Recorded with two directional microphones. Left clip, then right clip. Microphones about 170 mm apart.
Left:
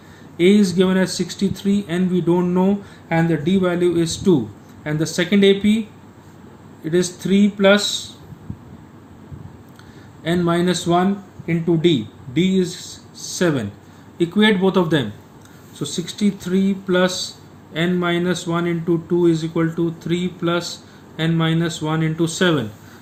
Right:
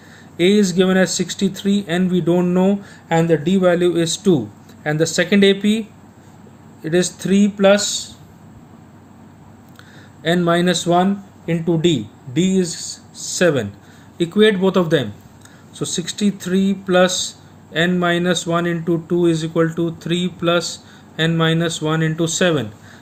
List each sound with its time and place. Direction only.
0.3 s speech: 45° right (ahead or behind)
6.8 s speech: 50° right (ahead or behind)
10.2 s speech: 50° right (ahead or behind)